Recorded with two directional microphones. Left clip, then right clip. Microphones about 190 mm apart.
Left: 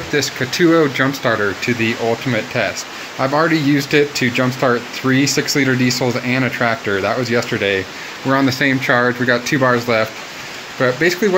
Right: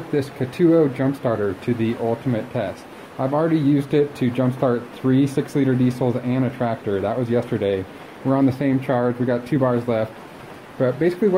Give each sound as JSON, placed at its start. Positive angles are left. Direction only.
{"t": 0.1, "sound": "speech", "side_deg": -5}
{"t": 3.2, "sound": "speech", "side_deg": 10}
{"t": 3.4, "sound": "speech", "side_deg": -5}
{"t": 4.6, "sound": "speech", "side_deg": 5}
{"t": 5.1, "sound": "speech", "side_deg": -5}